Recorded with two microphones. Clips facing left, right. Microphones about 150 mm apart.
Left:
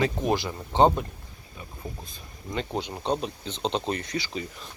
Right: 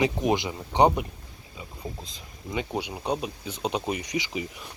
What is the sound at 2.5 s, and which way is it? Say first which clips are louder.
Speech: even; 10° right (ahead or behind).